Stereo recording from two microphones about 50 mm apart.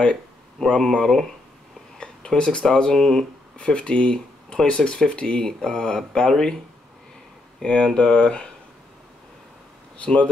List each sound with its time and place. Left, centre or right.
0.0 s speech: centre
2.0 s speech: centre
7.6 s speech: centre
9.9 s speech: left